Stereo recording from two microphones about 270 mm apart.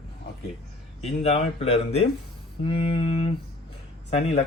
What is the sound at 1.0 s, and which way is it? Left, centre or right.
Speech, left.